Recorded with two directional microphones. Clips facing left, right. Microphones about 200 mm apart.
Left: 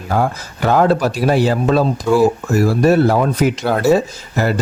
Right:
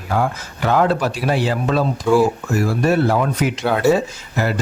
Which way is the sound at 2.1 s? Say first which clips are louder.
Right 1 dB; 5° left (ahead or behind).